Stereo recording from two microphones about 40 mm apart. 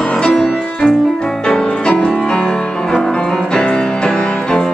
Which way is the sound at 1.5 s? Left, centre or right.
Left.